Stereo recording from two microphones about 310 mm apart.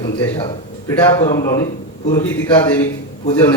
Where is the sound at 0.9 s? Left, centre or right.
Centre.